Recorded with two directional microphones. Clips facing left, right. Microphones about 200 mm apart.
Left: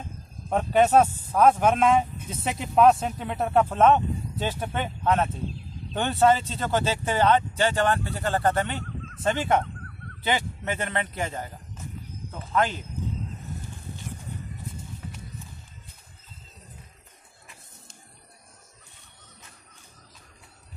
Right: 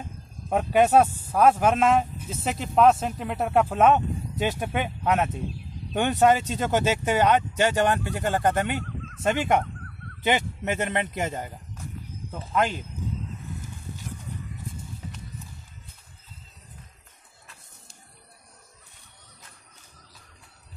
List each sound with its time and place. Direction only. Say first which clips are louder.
0.5 s speech: even; 10° right (ahead or behind)